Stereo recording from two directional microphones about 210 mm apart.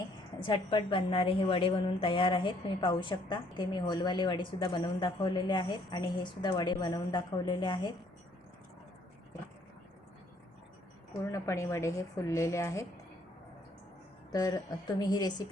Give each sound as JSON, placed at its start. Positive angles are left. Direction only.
{"t": 0.4, "sound": "a woman's voice", "side_deg": 25}
{"t": 11.3, "sound": "a woman's voice", "side_deg": 15}
{"t": 14.3, "sound": "a woman's voice", "side_deg": 15}